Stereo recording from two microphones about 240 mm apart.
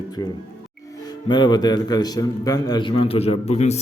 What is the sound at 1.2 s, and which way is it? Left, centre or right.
A man's voice, centre.